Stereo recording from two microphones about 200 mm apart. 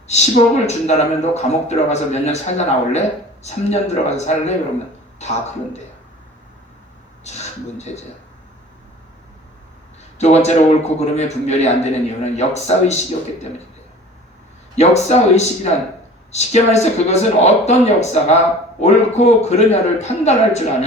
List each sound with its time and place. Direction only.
0.1 s a man's voice: 35° left (ahead or behind)
7.3 s speech: 35° left (ahead or behind)
10.2 s a man's voice: 35° left (ahead or behind)
14.8 s a man's voice: 35° left (ahead or behind)